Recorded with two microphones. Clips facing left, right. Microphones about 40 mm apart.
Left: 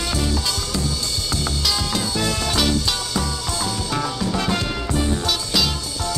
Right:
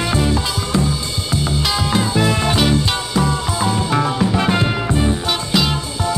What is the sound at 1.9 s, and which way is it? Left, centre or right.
Music, right.